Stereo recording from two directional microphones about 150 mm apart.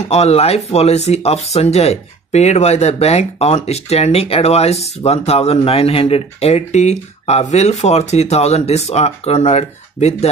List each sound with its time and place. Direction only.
0.1 s speech: 45° left (ahead or behind)